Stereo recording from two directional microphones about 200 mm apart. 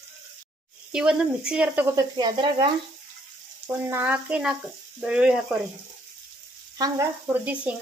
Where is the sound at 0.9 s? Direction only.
5° right (ahead or behind); by 2.7 s 20° right (ahead or behind).